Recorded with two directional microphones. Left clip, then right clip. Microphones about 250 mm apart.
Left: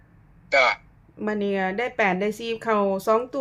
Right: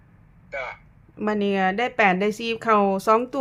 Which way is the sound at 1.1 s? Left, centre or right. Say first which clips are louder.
Right 2 dB; centre.